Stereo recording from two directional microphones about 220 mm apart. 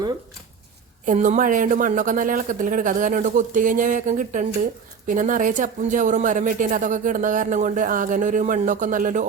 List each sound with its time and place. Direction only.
1.0 s speech: 35° right (ahead or behind)